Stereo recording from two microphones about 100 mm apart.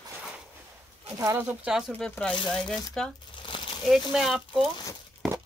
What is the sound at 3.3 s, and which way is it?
Crumpling, 55° left (ahead or behind).